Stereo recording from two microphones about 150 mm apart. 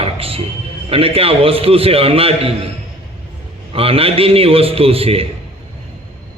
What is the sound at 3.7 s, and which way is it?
A man's voice, 40° right (ahead or behind).